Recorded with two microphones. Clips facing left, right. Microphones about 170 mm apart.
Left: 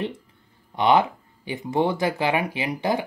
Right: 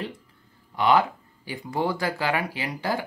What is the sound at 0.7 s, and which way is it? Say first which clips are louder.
Speech: left 2 dB; 20° left (ahead or behind).